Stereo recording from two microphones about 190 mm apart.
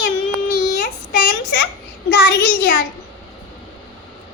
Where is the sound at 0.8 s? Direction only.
50° left (ahead or behind).